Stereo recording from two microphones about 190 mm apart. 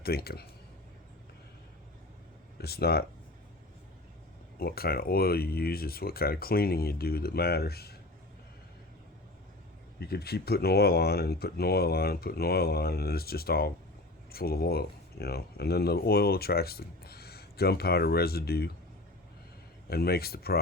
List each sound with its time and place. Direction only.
0.0 s speech: 55° left (ahead or behind)
2.6 s speech: 55° left (ahead or behind)
4.5 s speech: 55° left (ahead or behind)
10.0 s speech: 55° left (ahead or behind)
19.9 s speech: 55° left (ahead or behind)